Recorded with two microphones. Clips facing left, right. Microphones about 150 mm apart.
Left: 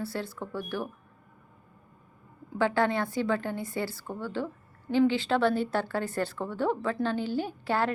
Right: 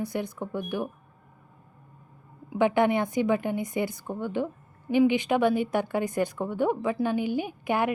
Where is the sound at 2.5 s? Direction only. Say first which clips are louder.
Right 4 dB; 20° right (ahead or behind).